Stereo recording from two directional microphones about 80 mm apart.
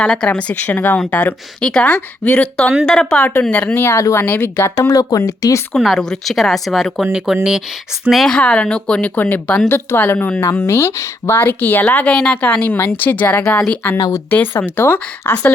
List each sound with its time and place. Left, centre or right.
0.0 s a woman's voice: centre
3.8 s speech: left
4.9 s speech: left
5.7 s speech: centre
8.1 s speech: centre
8.4 s speech: centre
12.1 s a woman's voice: centre